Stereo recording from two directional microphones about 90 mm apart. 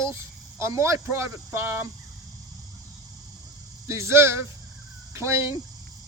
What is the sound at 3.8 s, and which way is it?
Speech, 30° right (ahead or behind).